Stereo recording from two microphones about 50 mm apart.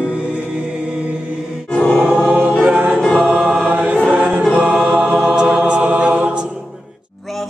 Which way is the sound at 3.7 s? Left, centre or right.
Right.